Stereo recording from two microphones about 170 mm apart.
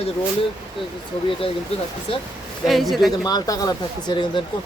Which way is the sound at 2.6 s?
Centre (ahead or behind).